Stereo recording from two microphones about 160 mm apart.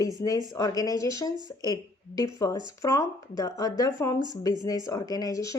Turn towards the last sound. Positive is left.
turn(degrees=20)  # may be behind; listen again after turning